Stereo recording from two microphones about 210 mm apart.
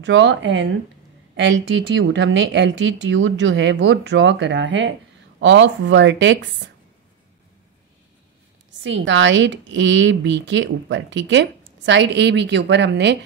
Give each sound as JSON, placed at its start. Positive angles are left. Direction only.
{"t": 0.0, "sound": "a woman's voice", "side_deg": -60}
{"t": 8.8, "sound": "a woman's voice", "side_deg": -60}